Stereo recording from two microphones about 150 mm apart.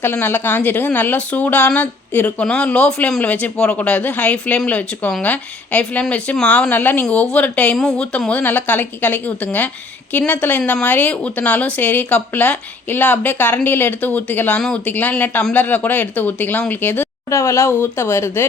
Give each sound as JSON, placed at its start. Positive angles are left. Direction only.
{"t": 0.0, "sound": "speech", "side_deg": 15}